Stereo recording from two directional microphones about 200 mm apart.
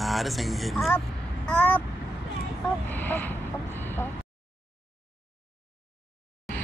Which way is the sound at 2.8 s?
10° left (ahead or behind).